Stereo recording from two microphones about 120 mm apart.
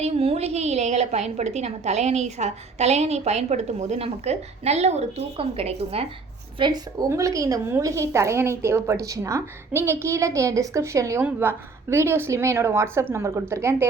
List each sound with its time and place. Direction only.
0.0 s a woman's voice: 60° right (ahead or behind)
6.6 s a woman's voice: 45° right (ahead or behind)
7.1 s a woman's voice: 25° right (ahead or behind)
11.2 s a woman's voice: 15° right (ahead or behind)